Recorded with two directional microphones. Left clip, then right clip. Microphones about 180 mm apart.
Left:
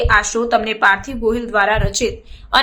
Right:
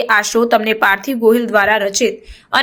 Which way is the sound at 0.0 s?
25° right (ahead or behind).